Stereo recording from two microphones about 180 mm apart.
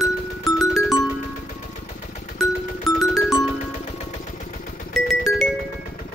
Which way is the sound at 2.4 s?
Centre (ahead or behind).